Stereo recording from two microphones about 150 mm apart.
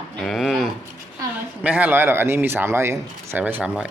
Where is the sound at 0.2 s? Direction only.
Centre (ahead or behind).